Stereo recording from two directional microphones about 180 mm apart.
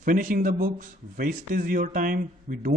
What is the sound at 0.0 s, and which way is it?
Speech, 50° right (ahead or behind).